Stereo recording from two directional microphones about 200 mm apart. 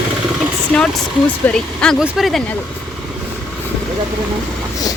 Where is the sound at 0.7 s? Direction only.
5° left (ahead or behind).